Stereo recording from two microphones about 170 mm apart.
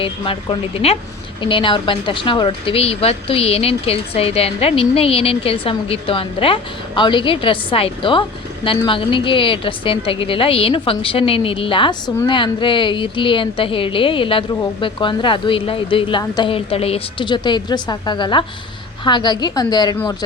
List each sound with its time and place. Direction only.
0.0 s a woman's voice: 30° left (ahead or behind)